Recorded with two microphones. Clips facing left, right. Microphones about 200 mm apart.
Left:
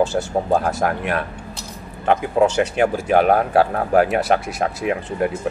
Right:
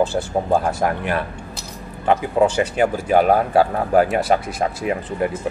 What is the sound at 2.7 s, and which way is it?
Speech, centre (ahead or behind).